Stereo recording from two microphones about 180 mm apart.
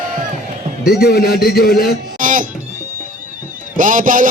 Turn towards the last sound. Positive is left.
turn(degrees=-50)  # may be behind; listen again after turning